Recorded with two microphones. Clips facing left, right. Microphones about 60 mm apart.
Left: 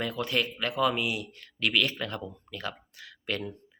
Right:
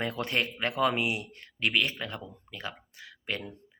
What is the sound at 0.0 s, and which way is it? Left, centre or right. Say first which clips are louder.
Speech: left 1 dB; right.